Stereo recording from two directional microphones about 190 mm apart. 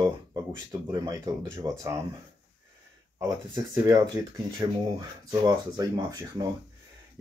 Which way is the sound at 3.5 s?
20° right (ahead or behind).